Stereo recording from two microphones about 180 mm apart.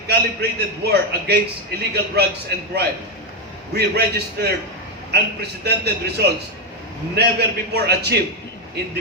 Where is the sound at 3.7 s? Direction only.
65° right (ahead or behind).